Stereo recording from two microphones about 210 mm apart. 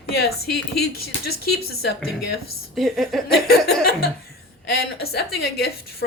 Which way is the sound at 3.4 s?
45° left (ahead or behind).